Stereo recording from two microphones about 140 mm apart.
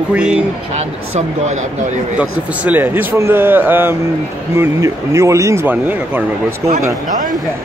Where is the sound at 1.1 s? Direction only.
55° right (ahead or behind).